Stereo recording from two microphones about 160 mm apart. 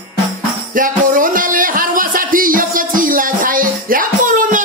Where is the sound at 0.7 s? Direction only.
60° right (ahead or behind).